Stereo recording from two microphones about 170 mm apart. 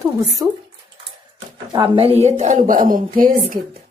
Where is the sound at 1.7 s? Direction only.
30° right (ahead or behind).